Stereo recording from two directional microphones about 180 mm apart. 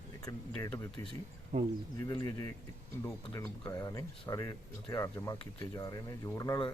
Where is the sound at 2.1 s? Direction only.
20° left (ahead or behind).